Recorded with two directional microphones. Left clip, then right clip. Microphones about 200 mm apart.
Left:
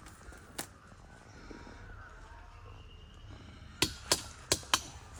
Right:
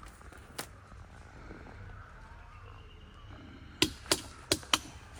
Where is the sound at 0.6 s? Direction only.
Centre (ahead or behind).